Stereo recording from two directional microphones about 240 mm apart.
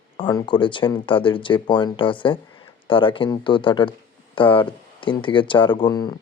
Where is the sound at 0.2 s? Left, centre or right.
Centre.